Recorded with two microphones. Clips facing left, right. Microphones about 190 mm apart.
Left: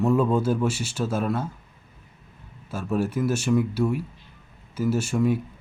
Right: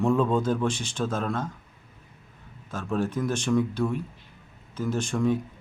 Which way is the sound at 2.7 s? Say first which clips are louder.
Left 2 dB; 10° left (ahead or behind).